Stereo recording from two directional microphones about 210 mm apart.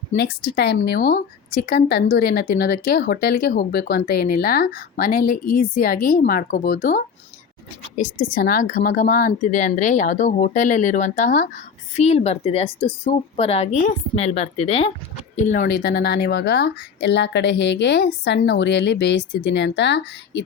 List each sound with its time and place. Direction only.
0.2 s a woman's voice: 50° left (ahead or behind)
15.6 s speech: 50° left (ahead or behind)